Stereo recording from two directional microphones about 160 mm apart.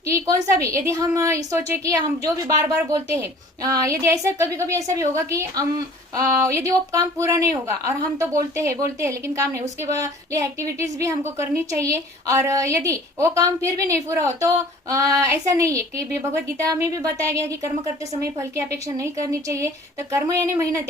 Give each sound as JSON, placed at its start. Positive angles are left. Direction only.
{"t": 0.1, "sound": "a woman's voice", "side_deg": -20}